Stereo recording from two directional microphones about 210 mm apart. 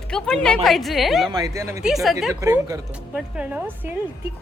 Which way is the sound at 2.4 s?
15° right (ahead or behind).